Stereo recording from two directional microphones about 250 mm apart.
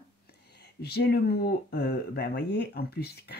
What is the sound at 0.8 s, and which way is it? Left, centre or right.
Speech, left.